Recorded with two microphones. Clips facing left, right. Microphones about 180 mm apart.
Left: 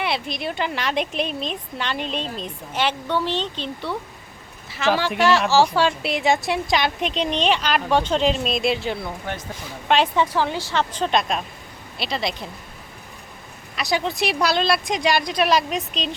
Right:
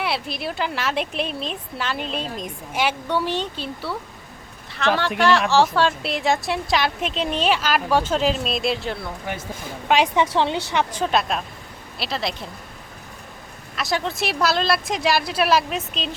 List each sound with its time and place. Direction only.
0.0 s speech: 5° right (ahead or behind)
9.9 s a woman's voice: 10° right (ahead or behind)
10.3 s speech: 25° right (ahead or behind)
10.7 s speech: 15° right (ahead or behind)
13.7 s speech: centre (ahead or behind)